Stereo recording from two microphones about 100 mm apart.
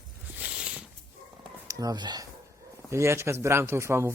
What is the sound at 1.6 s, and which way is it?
Speech, 35° right (ahead or behind).